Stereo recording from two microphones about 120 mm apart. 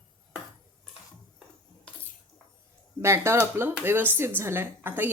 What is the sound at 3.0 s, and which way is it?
Speech, 20° right (ahead or behind).